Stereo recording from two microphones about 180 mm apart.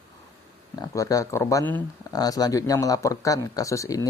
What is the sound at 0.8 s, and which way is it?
Speech, 20° left (ahead or behind).